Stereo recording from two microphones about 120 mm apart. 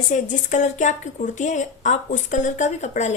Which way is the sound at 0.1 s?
90° left.